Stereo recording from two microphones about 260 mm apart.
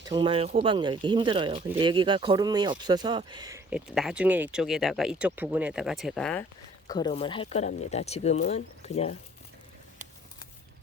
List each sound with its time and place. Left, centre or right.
0.0 s speech: centre
6.8 s speech: centre